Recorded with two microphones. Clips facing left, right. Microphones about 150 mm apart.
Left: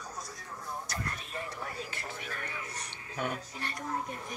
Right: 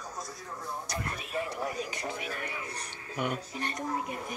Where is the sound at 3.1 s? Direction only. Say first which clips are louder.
Right 3 dB; 15° right (ahead or behind).